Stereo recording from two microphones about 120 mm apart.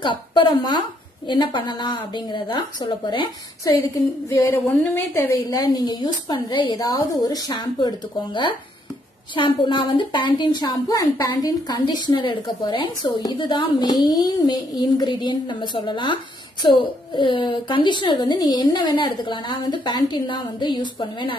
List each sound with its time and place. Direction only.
0.0 s a woman's voice: 40° left (ahead or behind)
3.6 s a woman's voice: 30° left (ahead or behind)
9.3 s a woman's voice: 40° left (ahead or behind)
17.2 s a woman's voice: 40° left (ahead or behind)